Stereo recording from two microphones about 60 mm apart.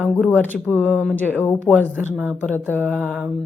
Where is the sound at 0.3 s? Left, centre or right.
Left.